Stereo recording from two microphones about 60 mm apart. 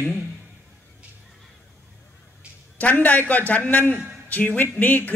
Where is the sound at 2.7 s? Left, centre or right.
Left.